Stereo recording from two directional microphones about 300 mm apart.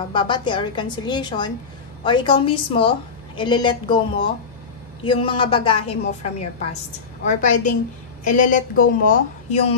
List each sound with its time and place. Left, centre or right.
0.1 s a woman's voice: centre
5.0 s a woman's voice: centre